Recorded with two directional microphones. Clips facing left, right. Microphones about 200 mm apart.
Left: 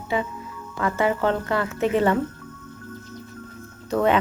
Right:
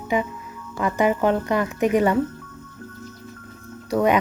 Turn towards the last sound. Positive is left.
turn(degrees=-10)  # may be behind; listen again after turning